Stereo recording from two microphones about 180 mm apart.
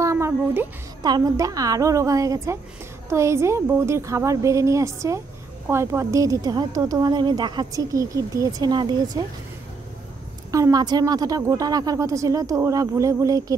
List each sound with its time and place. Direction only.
0.0 s a woman's voice: 15° right (ahead or behind)
10.5 s a woman's voice: 20° right (ahead or behind)